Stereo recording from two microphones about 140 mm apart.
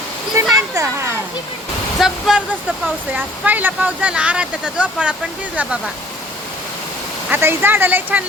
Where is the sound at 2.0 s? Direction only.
5° right (ahead or behind).